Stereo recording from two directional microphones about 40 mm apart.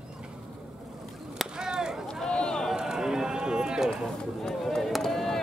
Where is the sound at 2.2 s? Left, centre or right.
Centre.